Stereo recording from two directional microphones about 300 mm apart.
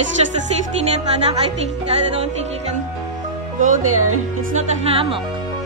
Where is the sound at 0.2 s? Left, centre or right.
Right.